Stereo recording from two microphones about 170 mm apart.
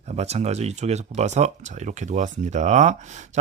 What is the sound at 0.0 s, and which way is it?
Speech, 40° right (ahead or behind).